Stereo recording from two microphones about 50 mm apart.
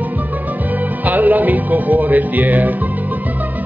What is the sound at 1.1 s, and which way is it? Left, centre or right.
Music, right.